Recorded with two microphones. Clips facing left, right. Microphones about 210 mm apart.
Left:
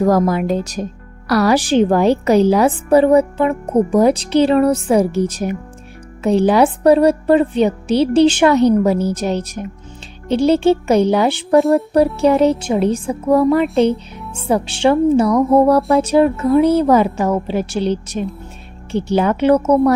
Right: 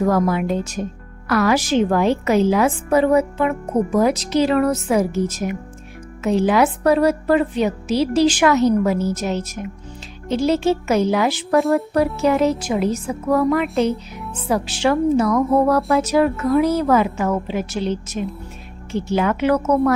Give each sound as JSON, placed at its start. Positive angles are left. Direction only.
{"t": 0.0, "sound": "a woman's voice", "side_deg": 40}